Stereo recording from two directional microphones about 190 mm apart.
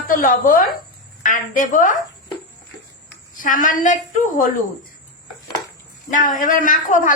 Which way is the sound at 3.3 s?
45° left (ahead or behind).